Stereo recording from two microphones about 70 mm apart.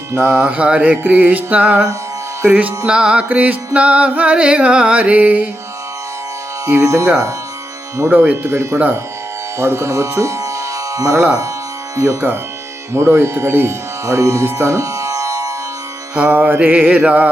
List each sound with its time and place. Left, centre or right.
0.2 s music: right
6.7 s speech: right
8.1 s music: right
8.4 s speech: right
10.2 s music: right
12.0 s speech: right
14.5 s music: right
16.1 s music: right